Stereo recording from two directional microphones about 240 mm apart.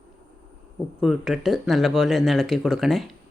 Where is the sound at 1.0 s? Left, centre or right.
Centre.